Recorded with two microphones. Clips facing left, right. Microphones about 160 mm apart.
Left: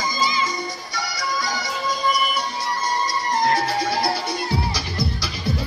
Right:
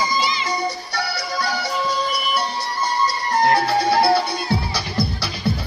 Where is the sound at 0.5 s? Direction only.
65° right (ahead or behind).